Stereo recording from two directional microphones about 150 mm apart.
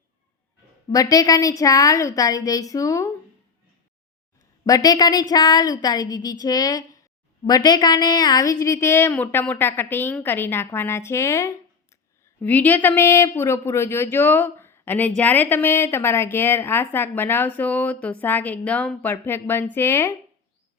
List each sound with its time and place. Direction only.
0.9 s a woman's voice: 25° left (ahead or behind)
4.6 s a woman's voice: 25° left (ahead or behind)